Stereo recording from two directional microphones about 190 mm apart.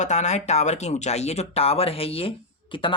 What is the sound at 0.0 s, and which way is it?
Speech, 40° left (ahead or behind).